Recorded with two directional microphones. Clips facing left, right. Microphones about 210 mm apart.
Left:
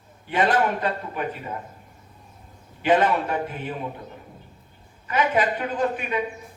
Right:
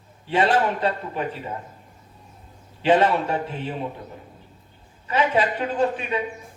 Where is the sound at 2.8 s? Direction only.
30° right (ahead or behind).